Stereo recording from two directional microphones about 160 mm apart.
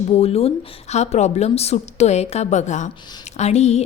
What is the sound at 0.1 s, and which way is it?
A woman's voice, 40° left (ahead or behind).